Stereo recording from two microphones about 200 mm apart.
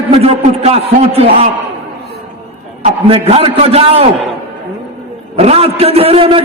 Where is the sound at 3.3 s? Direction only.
30° right (ahead or behind).